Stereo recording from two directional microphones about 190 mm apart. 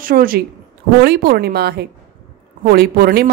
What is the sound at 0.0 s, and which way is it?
A woman's voice, 50° right (ahead or behind).